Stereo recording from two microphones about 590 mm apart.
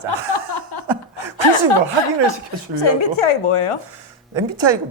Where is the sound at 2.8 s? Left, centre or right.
Left.